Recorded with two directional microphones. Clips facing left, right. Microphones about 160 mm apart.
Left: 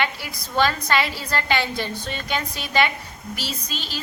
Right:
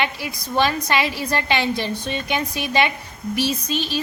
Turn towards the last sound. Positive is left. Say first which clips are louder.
# right 9 dB
turn(degrees=-20)  # may be behind; listen again after turning